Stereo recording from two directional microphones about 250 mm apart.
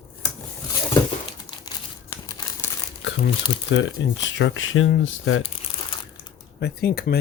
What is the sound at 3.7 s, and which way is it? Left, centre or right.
Speech, left.